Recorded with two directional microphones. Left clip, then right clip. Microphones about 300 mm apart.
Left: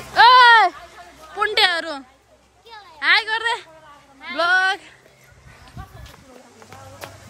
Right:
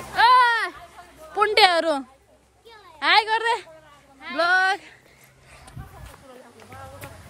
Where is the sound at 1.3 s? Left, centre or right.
Centre.